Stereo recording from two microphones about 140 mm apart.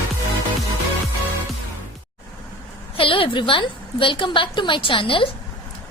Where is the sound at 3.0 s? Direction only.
40° left (ahead or behind).